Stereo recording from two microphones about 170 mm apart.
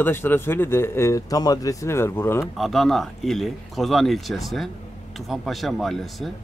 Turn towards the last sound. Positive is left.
turn(degrees=0)  # may be behind; listen again after turning